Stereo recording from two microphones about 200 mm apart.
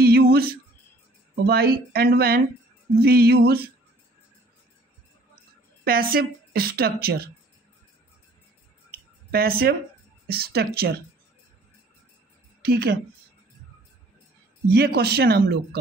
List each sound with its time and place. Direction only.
0.0 s a sound: 50° right (ahead or behind)
1.4 s a woman's voice: 50° right (ahead or behind)
5.9 s a woman's voice: 45° right (ahead or behind)
8.9 s a sound: 50° right (ahead or behind)
10.2 s a woman's voice: 50° right (ahead or behind)
12.6 s a woman's voice: 50° right (ahead or behind)
14.7 s a woman's voice: 50° right (ahead or behind)